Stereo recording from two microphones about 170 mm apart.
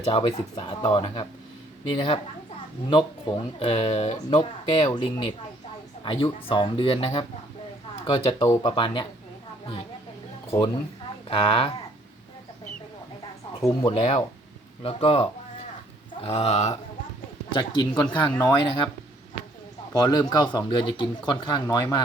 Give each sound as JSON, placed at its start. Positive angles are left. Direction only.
{"t": 0.1, "sound": "speech", "side_deg": 35}
{"t": 6.5, "sound": "speech", "side_deg": 30}
{"t": 11.3, "sound": "speech", "side_deg": 35}
{"t": 13.6, "sound": "speech", "side_deg": 30}
{"t": 17.5, "sound": "speech", "side_deg": 25}
{"t": 19.9, "sound": "speech", "side_deg": 20}